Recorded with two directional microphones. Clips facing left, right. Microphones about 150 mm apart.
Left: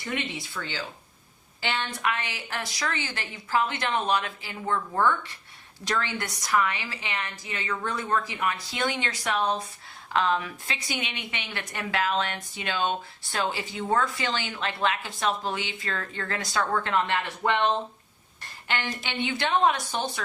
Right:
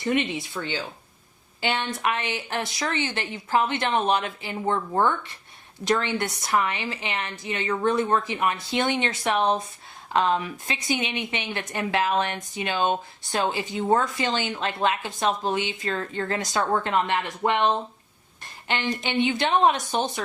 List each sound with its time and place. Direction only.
0.0 s speech: 25° right (ahead or behind)